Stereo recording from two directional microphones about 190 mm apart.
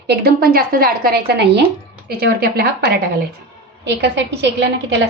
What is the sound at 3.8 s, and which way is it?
Speech, 65° right (ahead or behind).